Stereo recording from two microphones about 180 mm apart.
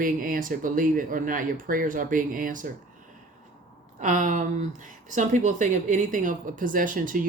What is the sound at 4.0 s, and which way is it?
Speech, 45° right (ahead or behind).